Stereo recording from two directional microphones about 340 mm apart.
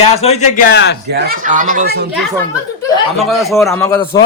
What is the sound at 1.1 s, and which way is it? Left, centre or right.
Speech, right.